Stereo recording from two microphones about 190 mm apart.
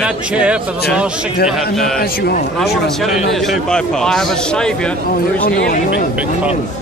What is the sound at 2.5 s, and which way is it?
A man's voice, centre (ahead or behind).